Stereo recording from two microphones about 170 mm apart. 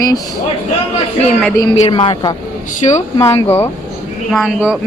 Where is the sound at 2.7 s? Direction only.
45° left (ahead or behind).